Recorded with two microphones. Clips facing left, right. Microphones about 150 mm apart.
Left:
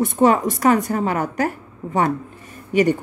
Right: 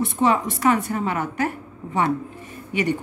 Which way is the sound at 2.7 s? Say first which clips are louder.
Left 6 dB; 45° left (ahead or behind).